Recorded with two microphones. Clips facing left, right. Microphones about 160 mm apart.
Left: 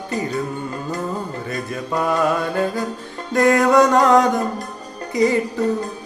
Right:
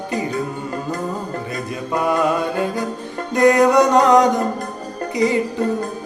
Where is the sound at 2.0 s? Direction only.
15° right (ahead or behind).